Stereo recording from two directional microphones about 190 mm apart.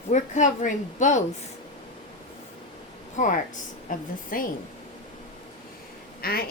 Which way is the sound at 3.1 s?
40° left (ahead or behind).